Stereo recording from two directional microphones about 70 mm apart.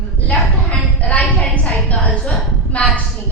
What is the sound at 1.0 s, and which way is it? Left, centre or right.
A woman's voice, centre.